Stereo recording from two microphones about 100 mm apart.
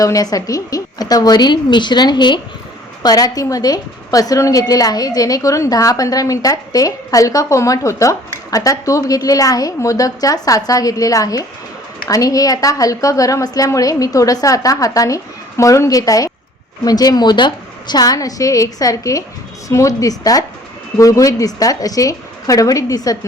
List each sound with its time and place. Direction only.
0.0 s a woman's voice: 35° left (ahead or behind)